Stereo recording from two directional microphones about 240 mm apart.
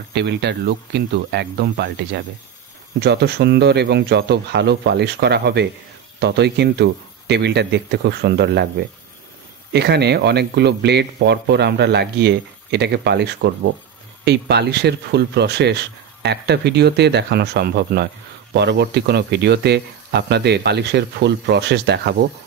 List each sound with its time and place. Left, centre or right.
0.1 s speech: right
9.7 s speech: right